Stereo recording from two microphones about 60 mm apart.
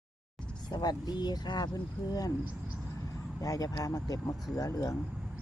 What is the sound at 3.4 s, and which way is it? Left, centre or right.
Speech, left.